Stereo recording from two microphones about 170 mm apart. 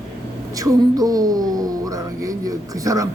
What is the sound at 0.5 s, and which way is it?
Speech, 20° right (ahead or behind).